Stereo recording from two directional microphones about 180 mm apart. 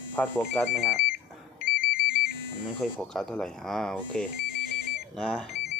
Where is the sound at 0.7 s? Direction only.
5° right (ahead or behind).